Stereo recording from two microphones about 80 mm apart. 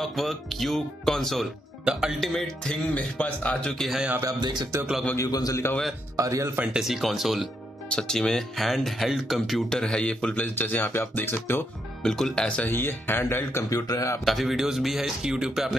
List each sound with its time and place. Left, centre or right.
0.0 s speech: centre
1.9 s speech: centre
3.7 s speech: centre
4.3 s speech: right
5.1 s a man's voice: left
6.1 s speech: right
6.6 s speech: centre
10.4 s speech: left
12.0 s speech: centre
12.7 s speech: left
14.2 s speech: centre